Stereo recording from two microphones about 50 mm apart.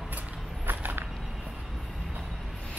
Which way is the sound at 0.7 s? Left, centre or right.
Right.